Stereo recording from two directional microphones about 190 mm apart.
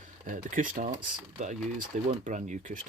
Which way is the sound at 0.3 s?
45° right (ahead or behind).